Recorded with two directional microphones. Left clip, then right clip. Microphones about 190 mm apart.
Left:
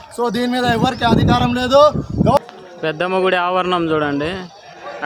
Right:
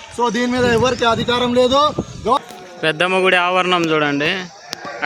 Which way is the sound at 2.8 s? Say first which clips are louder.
Right 2 dB; 5° right (ahead or behind).